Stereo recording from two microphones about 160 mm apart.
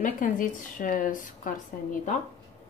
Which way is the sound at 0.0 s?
55° left (ahead or behind).